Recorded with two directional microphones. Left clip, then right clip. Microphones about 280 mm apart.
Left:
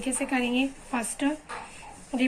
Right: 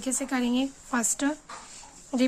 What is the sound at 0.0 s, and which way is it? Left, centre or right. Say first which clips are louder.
Speech: left 1 dB; right.